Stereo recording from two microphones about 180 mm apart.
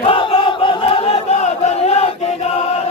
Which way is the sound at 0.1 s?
30° left (ahead or behind).